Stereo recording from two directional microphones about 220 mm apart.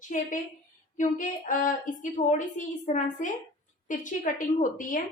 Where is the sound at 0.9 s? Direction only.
35° left (ahead or behind).